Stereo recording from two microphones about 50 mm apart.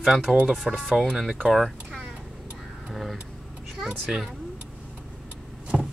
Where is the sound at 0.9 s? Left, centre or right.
Centre.